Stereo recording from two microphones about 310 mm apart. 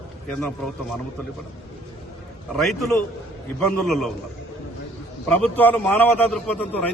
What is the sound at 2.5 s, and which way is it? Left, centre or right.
A man's voice, centre.